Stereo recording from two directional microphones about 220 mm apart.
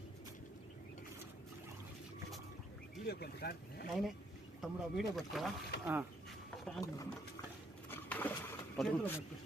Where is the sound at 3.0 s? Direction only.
45° left (ahead or behind).